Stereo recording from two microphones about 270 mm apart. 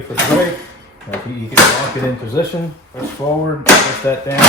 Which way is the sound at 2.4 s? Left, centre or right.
Centre.